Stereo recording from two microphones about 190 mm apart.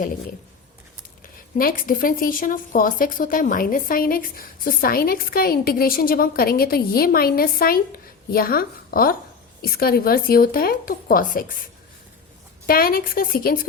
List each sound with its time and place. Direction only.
1.5 s a woman's voice: 45° left (ahead or behind)
12.6 s a woman's voice: 50° left (ahead or behind)